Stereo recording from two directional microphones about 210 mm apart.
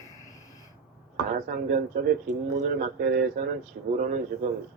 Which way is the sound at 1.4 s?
45° right (ahead or behind).